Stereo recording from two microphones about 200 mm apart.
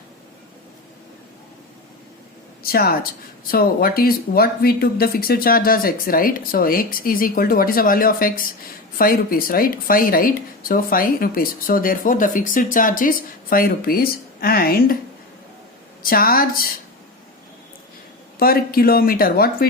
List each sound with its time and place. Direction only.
2.6 s speech: 50° left (ahead or behind)
16.0 s speech: 45° left (ahead or behind)
18.3 s speech: 50° left (ahead or behind)